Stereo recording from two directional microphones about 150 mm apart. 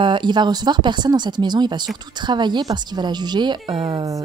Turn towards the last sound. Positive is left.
turn(degrees=-25)  # may be behind; listen again after turning